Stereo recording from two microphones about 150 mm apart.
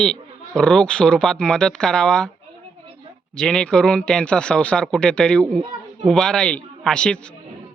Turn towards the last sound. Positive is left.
turn(degrees=5)  # may be behind; listen again after turning